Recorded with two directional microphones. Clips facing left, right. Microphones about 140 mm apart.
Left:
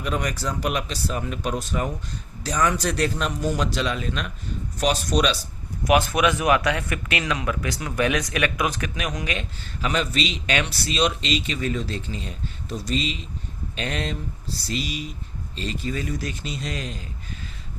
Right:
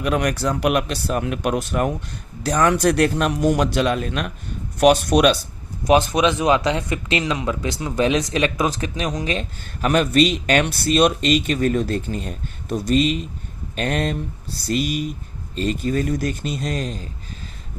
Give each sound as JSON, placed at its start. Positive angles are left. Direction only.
{"t": 0.0, "sound": "a man's voice", "side_deg": -65}
{"t": 5.9, "sound": "speech", "side_deg": -20}
{"t": 9.8, "sound": "speech", "side_deg": -55}